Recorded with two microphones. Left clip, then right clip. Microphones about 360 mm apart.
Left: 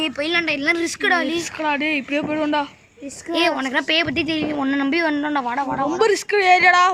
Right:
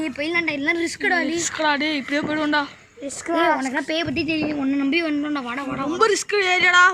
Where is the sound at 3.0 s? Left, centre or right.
Right.